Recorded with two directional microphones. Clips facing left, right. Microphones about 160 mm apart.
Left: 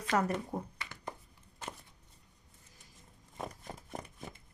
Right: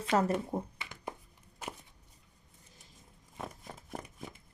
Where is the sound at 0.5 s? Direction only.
20° right (ahead or behind).